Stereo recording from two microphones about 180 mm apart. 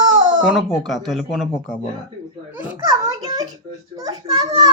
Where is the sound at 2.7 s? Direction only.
20° right (ahead or behind).